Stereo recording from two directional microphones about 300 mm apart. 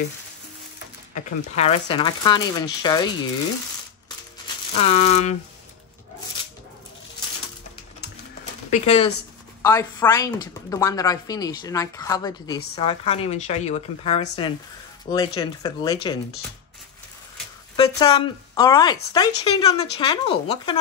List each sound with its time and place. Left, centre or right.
1.1 s speech: left
4.7 s a woman's voice: left
8.6 s speech: centre
9.6 s a woman's voice: centre
17.7 s speech: centre